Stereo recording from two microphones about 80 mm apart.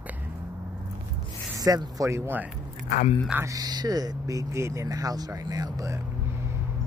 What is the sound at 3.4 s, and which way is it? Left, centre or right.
Speech, right.